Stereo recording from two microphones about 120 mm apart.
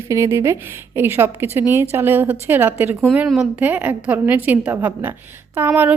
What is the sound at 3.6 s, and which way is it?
A woman's voice, 15° right (ahead or behind).